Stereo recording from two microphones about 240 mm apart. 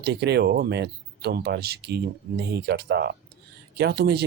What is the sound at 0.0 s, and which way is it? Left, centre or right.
Speech, right.